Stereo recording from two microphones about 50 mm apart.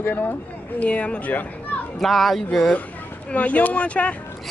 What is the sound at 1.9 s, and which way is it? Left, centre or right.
Speech, centre.